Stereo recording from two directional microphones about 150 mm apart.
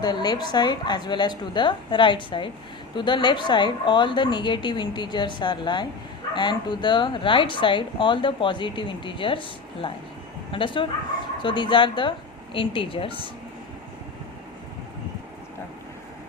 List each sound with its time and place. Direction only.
0.0 s a woman's voice: 25° left (ahead or behind)